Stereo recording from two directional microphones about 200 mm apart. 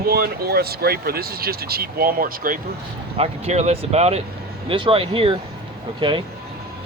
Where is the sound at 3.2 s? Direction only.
30° right (ahead or behind).